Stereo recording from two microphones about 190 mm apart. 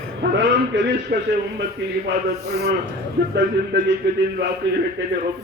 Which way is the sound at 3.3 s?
65° right (ahead or behind).